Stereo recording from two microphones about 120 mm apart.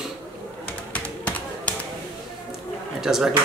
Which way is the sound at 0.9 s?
10° left (ahead or behind).